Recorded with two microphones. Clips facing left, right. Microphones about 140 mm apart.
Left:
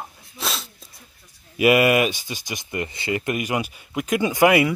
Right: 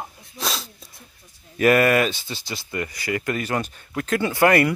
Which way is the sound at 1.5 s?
10° left (ahead or behind).